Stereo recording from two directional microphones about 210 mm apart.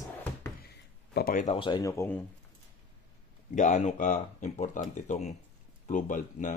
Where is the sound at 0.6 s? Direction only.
50° left (ahead or behind).